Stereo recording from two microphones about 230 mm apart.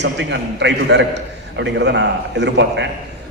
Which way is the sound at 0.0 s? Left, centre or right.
Right.